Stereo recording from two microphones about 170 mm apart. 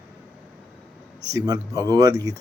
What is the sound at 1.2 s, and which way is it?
Speech, 20° right (ahead or behind).